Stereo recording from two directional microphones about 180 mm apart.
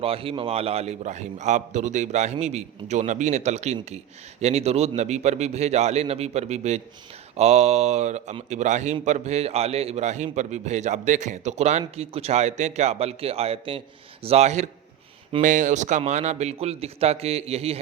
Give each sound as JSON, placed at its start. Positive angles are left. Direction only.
{"t": 0.0, "sound": "a man's voice", "side_deg": -30}